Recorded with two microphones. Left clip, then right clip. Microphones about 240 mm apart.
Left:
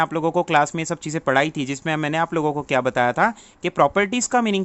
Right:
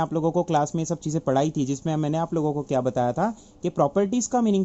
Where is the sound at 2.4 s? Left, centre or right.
Left.